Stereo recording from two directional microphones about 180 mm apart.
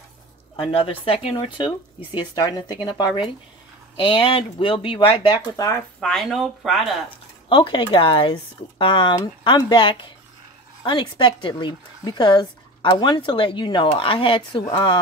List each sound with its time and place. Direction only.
0.6 s speech: 30° left (ahead or behind)
5.9 s speech: centre (ahead or behind)
7.4 s speech: 30° left (ahead or behind)